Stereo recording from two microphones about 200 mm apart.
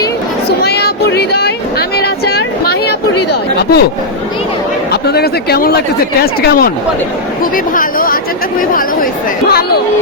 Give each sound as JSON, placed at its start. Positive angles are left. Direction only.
{"t": 0.6, "sound": "a sound", "side_deg": 50}
{"t": 3.6, "sound": "speech", "side_deg": 50}
{"t": 5.0, "sound": "speech", "side_deg": 55}
{"t": 9.5, "sound": "speech", "side_deg": 50}